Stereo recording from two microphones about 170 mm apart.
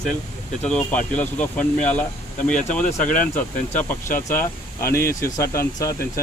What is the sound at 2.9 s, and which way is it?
Speech, 50° left (ahead or behind).